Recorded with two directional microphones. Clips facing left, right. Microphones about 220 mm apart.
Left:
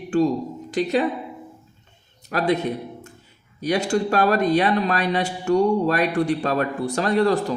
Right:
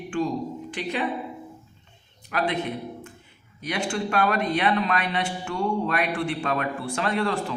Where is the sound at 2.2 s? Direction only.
40° left (ahead or behind).